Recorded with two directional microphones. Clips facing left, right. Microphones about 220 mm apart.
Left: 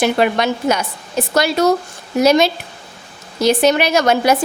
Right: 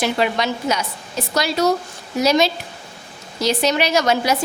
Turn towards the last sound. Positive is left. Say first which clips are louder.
# left 4 dB
turn(degrees=55)  # may be behind; listen again after turning